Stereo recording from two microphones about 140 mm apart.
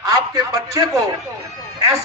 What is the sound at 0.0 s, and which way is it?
A man's voice, 25° right (ahead or behind).